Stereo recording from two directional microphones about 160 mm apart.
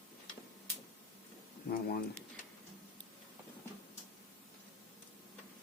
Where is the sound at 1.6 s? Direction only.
65° left (ahead or behind).